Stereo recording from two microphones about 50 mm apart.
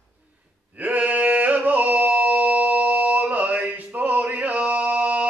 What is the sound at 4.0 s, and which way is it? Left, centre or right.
Music, right.